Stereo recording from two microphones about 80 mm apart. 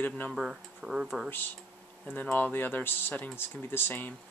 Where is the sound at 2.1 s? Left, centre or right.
Left.